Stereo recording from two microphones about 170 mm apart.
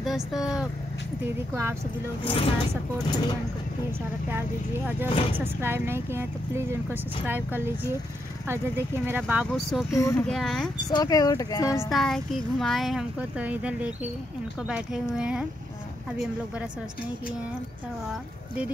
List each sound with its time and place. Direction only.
0.0 s speech: centre (ahead or behind)
1.2 s speech: 15° right (ahead or behind)
2.2 s speech: 35° left (ahead or behind)
4.3 s a child's voice: 15° right (ahead or behind); by 10.7 s 5° left (ahead or behind)
10.9 s speech: 20° left (ahead or behind)
11.9 s a child's voice: centre (ahead or behind)